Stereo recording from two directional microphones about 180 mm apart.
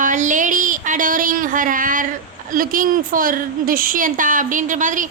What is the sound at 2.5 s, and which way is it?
Speech, 50° right (ahead or behind).